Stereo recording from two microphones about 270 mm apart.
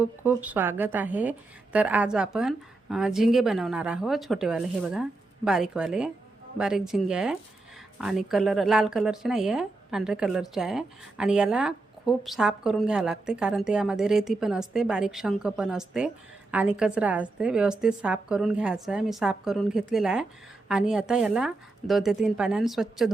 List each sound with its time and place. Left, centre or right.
0.0 s speech: centre